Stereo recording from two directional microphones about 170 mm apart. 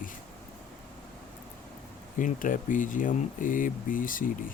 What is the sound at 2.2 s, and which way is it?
Speech, 50° left (ahead or behind).